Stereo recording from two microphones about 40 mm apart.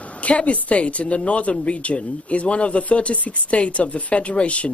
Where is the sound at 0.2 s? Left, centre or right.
Left.